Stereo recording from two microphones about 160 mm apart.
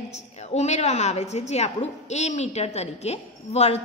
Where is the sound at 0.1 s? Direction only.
40° left (ahead or behind).